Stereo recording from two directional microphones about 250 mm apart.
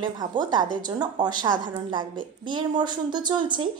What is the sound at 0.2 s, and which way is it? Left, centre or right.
A woman's voice, centre.